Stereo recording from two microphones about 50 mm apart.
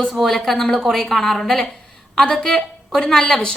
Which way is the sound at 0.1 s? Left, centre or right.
Centre.